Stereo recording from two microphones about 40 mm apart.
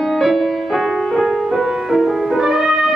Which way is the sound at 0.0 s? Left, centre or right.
Centre.